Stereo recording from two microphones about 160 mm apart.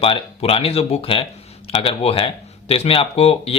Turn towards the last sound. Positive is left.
turn(degrees=35)  # may be behind; listen again after turning